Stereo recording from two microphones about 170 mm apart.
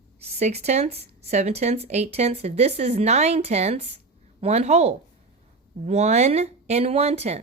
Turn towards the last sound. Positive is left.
turn(degrees=-40)  # may be behind; listen again after turning